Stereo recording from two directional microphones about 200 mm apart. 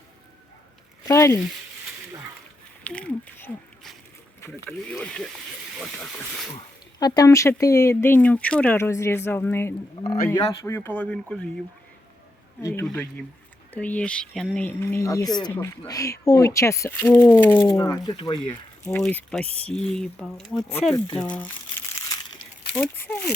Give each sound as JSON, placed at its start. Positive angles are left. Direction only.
{"t": 1.0, "sound": "speech", "side_deg": 15}
{"t": 2.8, "sound": "speech", "side_deg": 5}
{"t": 7.0, "sound": "speech", "side_deg": 20}
{"t": 12.6, "sound": "speech", "side_deg": 10}
{"t": 18.9, "sound": "speech", "side_deg": 5}
{"t": 22.7, "sound": "speech", "side_deg": 5}